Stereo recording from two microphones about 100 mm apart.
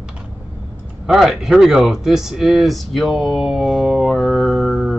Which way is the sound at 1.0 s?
5° right (ahead or behind).